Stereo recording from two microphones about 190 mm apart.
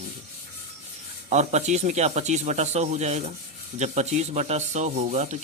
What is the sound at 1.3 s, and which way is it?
Speech, 35° right (ahead or behind).